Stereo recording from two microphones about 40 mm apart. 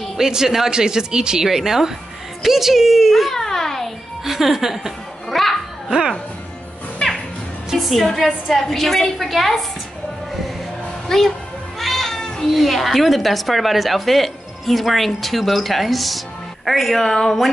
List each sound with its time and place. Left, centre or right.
0.3 s a woman's voice: centre
3.3 s a sound: centre
4.2 s a woman's voice: centre
5.3 s a child's voice: centre
7.7 s a woman's voice: centre
11.1 s a child's voice: centre
11.8 s music: centre
12.5 s speech: centre